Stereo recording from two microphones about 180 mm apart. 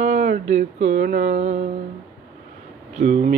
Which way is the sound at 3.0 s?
40° right (ahead or behind).